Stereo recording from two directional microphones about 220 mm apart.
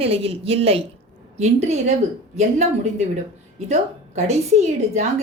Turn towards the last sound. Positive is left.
turn(degrees=-30)  # may be behind; listen again after turning